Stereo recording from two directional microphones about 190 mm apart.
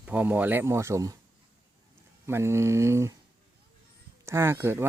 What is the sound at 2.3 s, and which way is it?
Speech, 15° right (ahead or behind).